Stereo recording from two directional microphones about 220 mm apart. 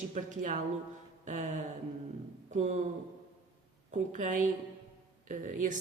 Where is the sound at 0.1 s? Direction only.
35° right (ahead or behind).